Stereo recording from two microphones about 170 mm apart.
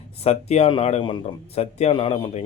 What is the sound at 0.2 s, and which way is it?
Speech, 40° left (ahead or behind).